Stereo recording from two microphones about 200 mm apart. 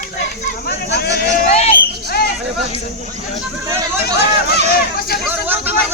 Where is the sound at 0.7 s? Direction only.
55° left (ahead or behind).